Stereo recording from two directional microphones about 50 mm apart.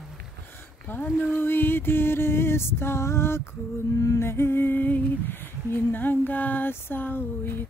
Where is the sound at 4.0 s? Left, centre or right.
Left.